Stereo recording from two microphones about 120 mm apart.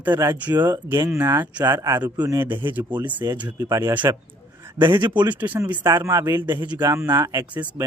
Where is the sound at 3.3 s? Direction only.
30° right (ahead or behind).